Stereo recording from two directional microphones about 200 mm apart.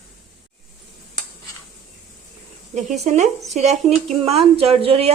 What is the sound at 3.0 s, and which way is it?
Speech, 35° right (ahead or behind).